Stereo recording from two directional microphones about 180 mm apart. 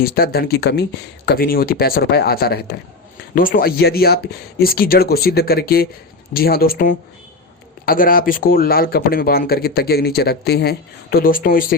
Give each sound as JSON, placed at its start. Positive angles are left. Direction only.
{"t": 0.0, "sound": "speech", "side_deg": 55}